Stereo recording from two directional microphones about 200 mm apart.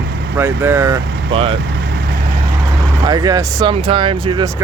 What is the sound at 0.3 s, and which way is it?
Speech, 10° right (ahead or behind).